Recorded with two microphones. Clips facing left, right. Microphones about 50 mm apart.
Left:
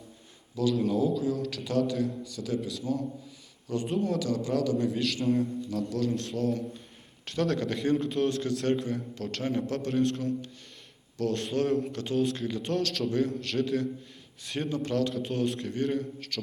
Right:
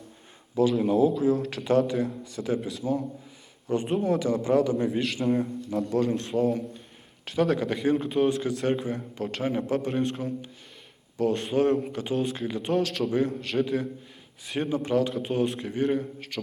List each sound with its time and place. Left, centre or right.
0.5 s a man's voice: right
5.2 s a man's voice: centre
5.9 s a man's voice: right; by 16.4 s centre